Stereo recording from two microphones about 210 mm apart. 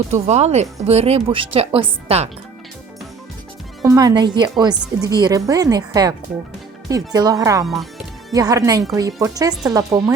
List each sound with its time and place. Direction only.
0.1 s speech: 30° right (ahead or behind)
3.8 s speech: 15° right (ahead or behind)
7.6 s speech: centre (ahead or behind)
8.3 s speech: 15° right (ahead or behind)